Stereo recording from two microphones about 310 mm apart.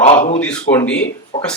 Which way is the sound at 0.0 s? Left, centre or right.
Left.